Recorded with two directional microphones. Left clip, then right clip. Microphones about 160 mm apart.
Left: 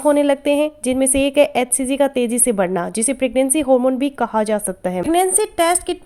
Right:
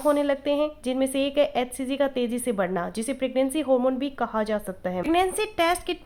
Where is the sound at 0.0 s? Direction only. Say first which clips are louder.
Left 8 dB; 40° left (ahead or behind).